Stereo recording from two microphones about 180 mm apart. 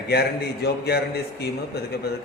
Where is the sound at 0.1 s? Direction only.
65° left (ahead or behind).